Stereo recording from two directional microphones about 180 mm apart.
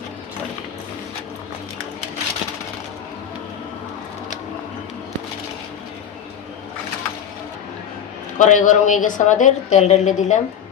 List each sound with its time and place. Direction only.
8.4 s speech: 45° left (ahead or behind)